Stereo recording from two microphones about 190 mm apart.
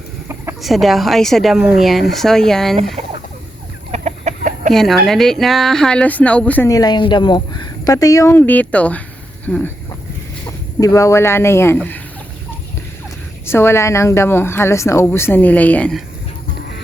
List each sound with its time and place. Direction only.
0.6 s a woman's voice: centre (ahead or behind)
3.9 s chicken: 40° right (ahead or behind)
4.7 s a woman's voice: centre (ahead or behind)
10.4 s speech: 20° left (ahead or behind)
13.4 s speech: 15° left (ahead or behind)